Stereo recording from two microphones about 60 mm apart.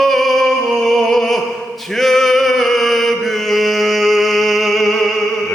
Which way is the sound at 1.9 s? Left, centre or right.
Centre.